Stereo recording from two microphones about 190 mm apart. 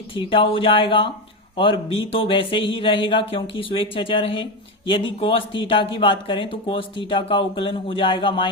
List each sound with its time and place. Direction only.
0.1 s speech: 25° left (ahead or behind)